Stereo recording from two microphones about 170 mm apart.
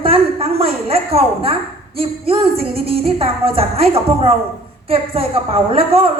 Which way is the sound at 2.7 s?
35° right (ahead or behind).